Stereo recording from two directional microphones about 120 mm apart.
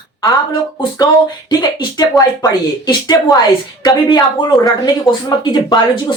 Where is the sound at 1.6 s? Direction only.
35° left (ahead or behind).